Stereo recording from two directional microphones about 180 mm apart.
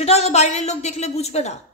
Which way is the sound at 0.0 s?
35° left (ahead or behind).